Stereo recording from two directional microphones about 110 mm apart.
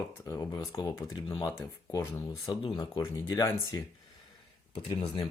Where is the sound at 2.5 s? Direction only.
45° left (ahead or behind).